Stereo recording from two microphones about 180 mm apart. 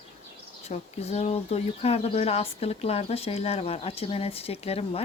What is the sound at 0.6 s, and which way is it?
Speech, 35° left (ahead or behind).